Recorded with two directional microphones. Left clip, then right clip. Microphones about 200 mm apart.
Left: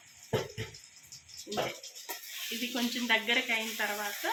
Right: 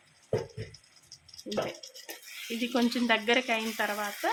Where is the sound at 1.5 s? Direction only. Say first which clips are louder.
Right 2 dB; 50° right (ahead or behind).